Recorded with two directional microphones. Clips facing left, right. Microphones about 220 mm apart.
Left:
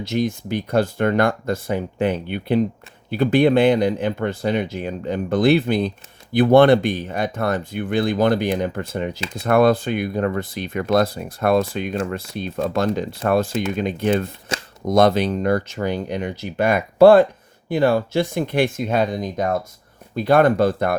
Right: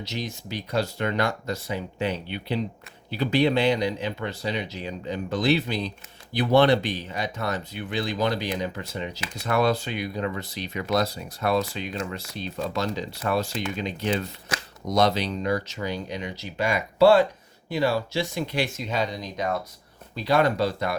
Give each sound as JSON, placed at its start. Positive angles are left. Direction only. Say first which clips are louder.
{"t": 0.0, "sound": "speech", "louder": "left 11 dB", "side_deg": 50}